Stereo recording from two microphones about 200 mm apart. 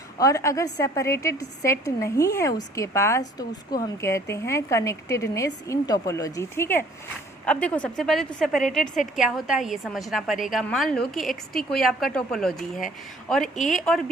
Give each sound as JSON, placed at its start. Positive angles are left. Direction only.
{"t": 0.2, "sound": "a woman's voice", "side_deg": 15}